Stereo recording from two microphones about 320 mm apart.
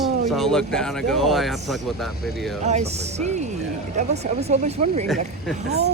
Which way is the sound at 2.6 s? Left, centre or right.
Right.